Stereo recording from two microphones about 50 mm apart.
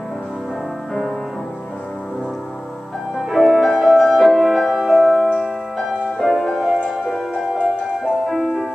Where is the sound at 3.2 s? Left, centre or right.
Centre.